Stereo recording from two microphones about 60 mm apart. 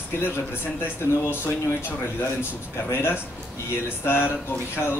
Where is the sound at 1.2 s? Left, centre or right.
Left.